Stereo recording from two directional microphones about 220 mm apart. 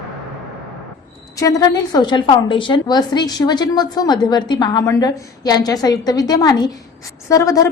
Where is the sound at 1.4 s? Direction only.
15° left (ahead or behind).